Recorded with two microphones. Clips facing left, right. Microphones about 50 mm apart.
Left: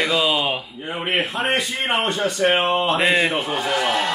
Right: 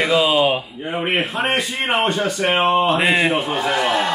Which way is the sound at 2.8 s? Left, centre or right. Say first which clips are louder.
Right 2 dB; centre.